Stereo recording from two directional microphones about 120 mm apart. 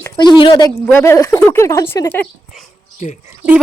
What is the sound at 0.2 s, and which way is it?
Speech, 40° left (ahead or behind).